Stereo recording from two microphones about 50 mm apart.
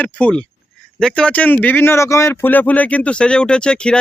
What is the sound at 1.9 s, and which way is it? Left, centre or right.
Speech, left.